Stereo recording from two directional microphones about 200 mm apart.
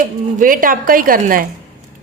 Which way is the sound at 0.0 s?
40° right (ahead or behind).